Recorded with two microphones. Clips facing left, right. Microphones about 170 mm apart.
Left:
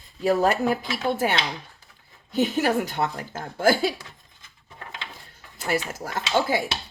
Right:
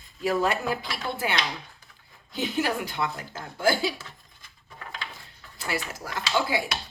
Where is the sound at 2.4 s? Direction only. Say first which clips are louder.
Left 5 dB; 45° left (ahead or behind).